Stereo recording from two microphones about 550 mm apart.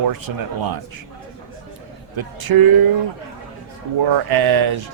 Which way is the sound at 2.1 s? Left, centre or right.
Right.